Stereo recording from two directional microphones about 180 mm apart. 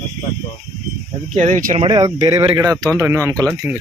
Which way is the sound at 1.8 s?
20° right (ahead or behind).